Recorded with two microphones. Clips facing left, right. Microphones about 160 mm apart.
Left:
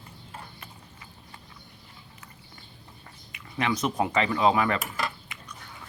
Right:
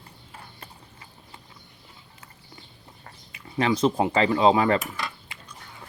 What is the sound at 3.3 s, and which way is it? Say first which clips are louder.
Speech: right 4 dB; 30° right (ahead or behind).